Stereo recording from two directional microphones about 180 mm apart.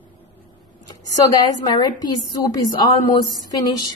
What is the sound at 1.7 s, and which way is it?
A woman's voice, 20° left (ahead or behind).